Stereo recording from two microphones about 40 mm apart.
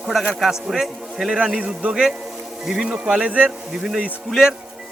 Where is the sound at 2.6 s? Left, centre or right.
Centre.